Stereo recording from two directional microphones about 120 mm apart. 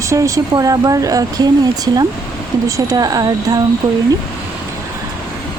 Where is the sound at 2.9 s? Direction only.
30° right (ahead or behind).